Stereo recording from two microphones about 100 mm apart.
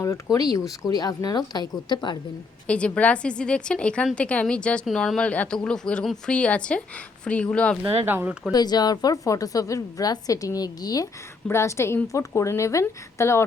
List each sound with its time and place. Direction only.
0.3 s a woman's voice: 35° left (ahead or behind)
2.6 s a woman's voice: 10° left (ahead or behind)
8.0 s speech: 20° right (ahead or behind)
8.5 s a woman's voice: 45° left (ahead or behind); by 13.4 s 25° left (ahead or behind)